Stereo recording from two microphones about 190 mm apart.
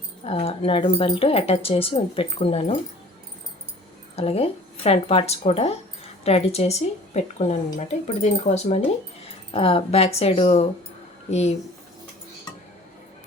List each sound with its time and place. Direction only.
0.3 s speech: 30° left (ahead or behind)
4.1 s a woman's voice: 30° left (ahead or behind)